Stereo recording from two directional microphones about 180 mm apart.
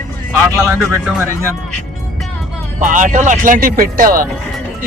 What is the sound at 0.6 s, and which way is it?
Speech, 10° right (ahead or behind).